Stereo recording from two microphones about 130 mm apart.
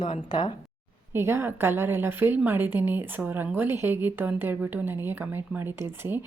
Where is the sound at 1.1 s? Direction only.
20° right (ahead or behind).